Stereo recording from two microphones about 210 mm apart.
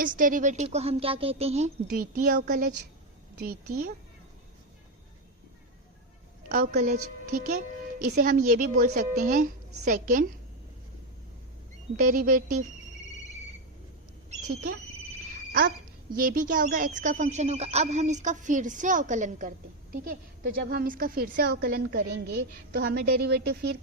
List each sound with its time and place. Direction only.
0.0 s a woman's voice: 40° right (ahead or behind)
6.5 s speech: 40° right (ahead or behind)
11.9 s speech: 40° right (ahead or behind)
14.3 s rodents: 35° right (ahead or behind)
16.1 s speech: 40° right (ahead or behind)